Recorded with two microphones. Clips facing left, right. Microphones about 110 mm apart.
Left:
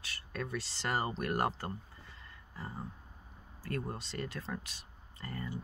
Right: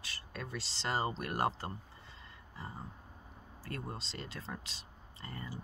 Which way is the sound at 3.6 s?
25° right (ahead or behind).